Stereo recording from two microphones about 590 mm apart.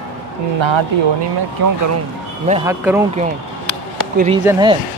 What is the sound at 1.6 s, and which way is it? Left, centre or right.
Speech, right.